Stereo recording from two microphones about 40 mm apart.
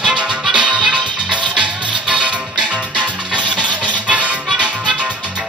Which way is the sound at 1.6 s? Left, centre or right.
Right.